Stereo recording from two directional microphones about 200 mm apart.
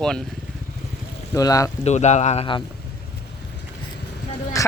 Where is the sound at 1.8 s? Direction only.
35° left (ahead or behind).